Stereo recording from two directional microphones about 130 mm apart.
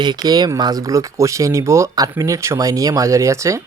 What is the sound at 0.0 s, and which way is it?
Speech, 30° right (ahead or behind).